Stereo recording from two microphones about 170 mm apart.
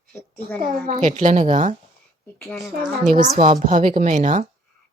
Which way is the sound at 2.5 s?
Centre (ahead or behind).